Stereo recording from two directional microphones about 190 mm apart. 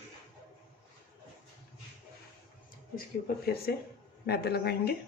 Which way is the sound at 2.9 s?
55° left (ahead or behind).